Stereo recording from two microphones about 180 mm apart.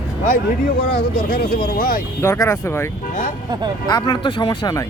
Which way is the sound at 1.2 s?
50° left (ahead or behind).